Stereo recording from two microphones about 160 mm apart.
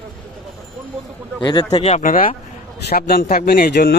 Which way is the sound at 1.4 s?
30° left (ahead or behind).